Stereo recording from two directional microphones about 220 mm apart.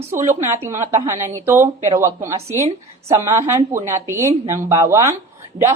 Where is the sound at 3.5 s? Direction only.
10° right (ahead or behind).